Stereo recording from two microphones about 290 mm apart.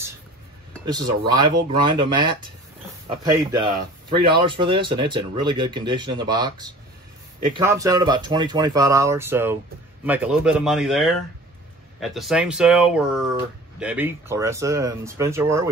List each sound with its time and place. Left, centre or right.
0.8 s speech: centre